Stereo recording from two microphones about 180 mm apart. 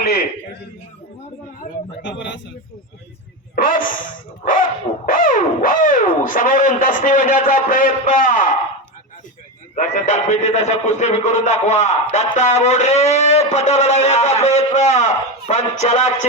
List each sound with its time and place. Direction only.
2.0 s speech: 80° left
3.5 s speech: 50° left (ahead or behind)
9.7 s a sound: 45° left (ahead or behind)